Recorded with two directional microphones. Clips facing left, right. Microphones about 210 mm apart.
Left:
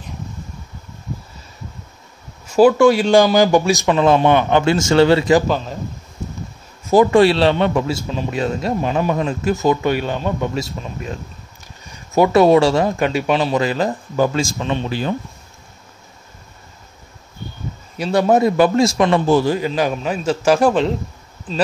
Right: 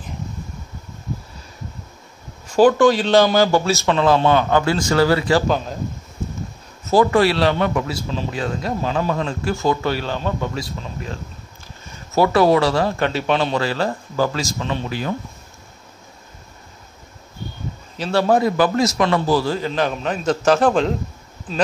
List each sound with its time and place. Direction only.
2.4 s a man's voice: 10° left (ahead or behind)
6.9 s a man's voice: 20° left (ahead or behind)
12.1 s a man's voice: 20° left (ahead or behind)
13.6 s a man's voice: 15° left (ahead or behind)
17.9 s a man's voice: 10° left (ahead or behind)